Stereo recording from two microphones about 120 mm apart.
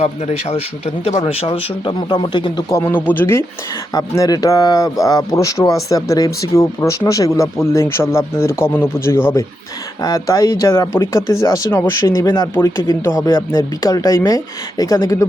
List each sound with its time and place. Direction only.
0.0 s a man's voice: 65° left (ahead or behind)
1.4 s speech: 50° left (ahead or behind)
2.7 s speech: 15° left (ahead or behind)
3.9 s speech: 30° left (ahead or behind)